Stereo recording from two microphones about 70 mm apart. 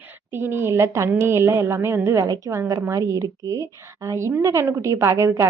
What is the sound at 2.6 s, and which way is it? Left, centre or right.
A woman's voice, right.